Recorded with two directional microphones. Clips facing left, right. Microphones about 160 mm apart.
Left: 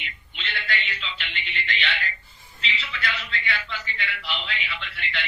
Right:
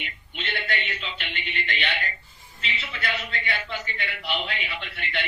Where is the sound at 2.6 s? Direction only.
50° right (ahead or behind).